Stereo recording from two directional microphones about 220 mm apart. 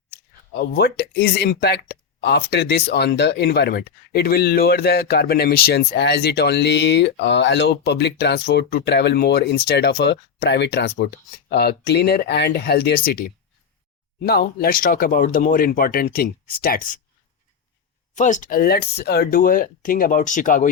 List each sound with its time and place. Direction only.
0.5 s speech: 45° left (ahead or behind)
14.3 s speech: 45° left (ahead or behind)
18.1 s speech: 35° left (ahead or behind)